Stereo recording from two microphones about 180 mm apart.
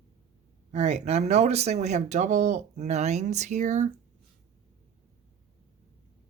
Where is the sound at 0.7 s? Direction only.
40° right (ahead or behind).